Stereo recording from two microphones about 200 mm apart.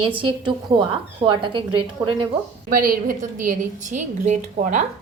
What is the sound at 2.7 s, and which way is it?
A woman's voice, 45° right (ahead or behind).